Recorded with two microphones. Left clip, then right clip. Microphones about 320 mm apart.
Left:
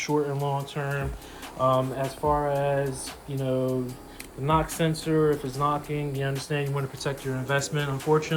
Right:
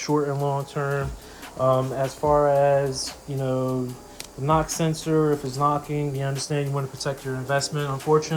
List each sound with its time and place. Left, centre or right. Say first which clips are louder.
0.1 s speech: right 4 dB; centre